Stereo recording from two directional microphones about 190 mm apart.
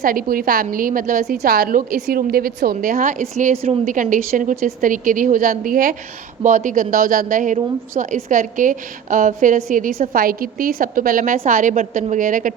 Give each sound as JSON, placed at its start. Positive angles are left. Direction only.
{"t": 0.0, "sound": "a woman's voice", "side_deg": -45}